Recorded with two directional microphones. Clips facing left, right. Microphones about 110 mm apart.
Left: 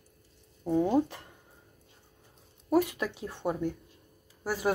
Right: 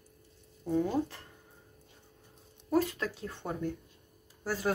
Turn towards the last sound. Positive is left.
turn(degrees=15)  # may be behind; listen again after turning